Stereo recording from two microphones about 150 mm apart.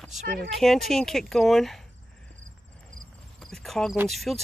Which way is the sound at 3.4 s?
Centre (ahead or behind).